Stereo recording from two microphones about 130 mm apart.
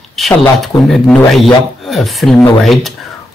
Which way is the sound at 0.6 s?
Centre (ahead or behind).